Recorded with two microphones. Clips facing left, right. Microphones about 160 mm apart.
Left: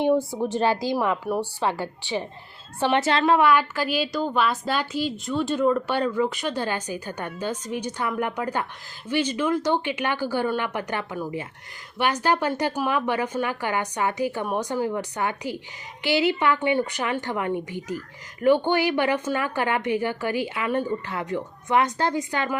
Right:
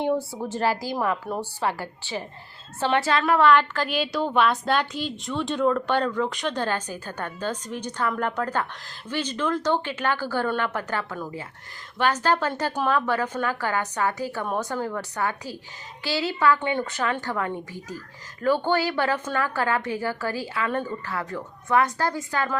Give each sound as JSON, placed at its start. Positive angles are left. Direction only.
{"t": 0.1, "sound": "a woman's voice", "side_deg": 15}
{"t": 3.3, "sound": "a woman's voice", "side_deg": 10}